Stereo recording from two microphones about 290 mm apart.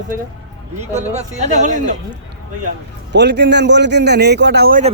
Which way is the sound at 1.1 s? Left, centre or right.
Right.